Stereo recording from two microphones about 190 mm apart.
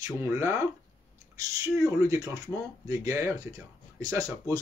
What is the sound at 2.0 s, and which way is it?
Speech, 20° right (ahead or behind).